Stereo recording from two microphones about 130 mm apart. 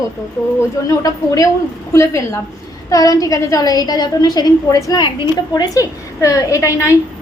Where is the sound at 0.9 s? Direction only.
25° left (ahead or behind).